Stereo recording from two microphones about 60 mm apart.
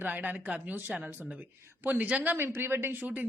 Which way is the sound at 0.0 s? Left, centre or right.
Right.